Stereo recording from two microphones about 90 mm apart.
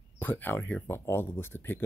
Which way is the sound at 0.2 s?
20° left (ahead or behind).